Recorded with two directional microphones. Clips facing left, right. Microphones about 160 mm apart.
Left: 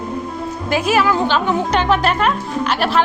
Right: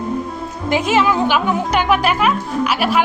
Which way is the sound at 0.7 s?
20° right (ahead or behind).